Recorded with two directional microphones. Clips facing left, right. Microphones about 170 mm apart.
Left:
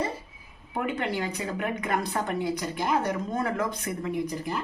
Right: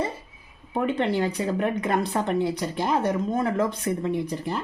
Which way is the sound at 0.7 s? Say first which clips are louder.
Right 5 dB; 30° right (ahead or behind).